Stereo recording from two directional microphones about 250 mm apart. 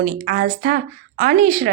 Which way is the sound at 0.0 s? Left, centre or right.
Right.